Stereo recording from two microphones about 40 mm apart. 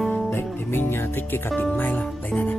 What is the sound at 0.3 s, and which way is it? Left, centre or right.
Music, left.